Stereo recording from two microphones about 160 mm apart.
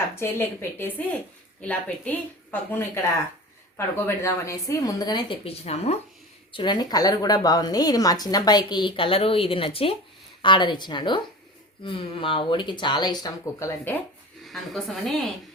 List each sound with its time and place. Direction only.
0.2 s a woman's voice: 15° left (ahead or behind); by 6.0 s 40° left (ahead or behind)
6.5 s a woman's voice: 30° left (ahead or behind)
14.4 s speech: centre (ahead or behind)